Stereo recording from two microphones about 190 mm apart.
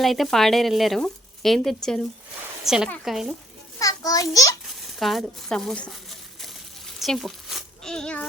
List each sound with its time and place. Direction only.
0.0 s speech: centre (ahead or behind)
3.8 s a child's voice: 20° left (ahead or behind)
4.6 s a sound: centre (ahead or behind)